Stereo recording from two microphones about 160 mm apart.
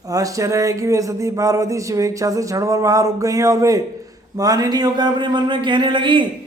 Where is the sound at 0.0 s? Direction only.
20° right (ahead or behind).